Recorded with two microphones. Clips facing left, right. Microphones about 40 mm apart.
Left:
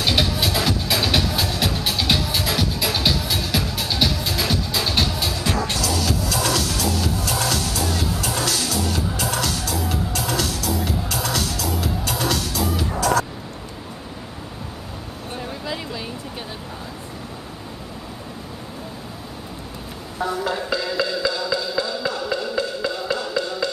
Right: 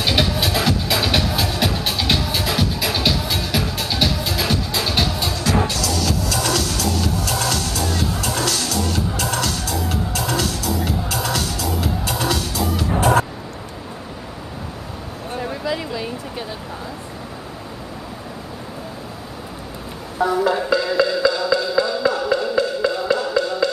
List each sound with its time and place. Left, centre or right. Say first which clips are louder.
0.0 s music: right 1 dB; centre
15.6 s a sound: right 5 dB; centre
20.2 s music: right 6 dB; centre